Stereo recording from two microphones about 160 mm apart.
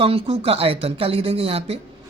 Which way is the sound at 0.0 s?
35° right (ahead or behind).